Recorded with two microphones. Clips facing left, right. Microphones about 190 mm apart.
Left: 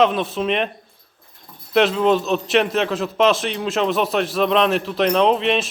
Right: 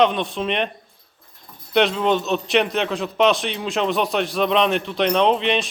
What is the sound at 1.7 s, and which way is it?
A man's voice, centre (ahead or behind).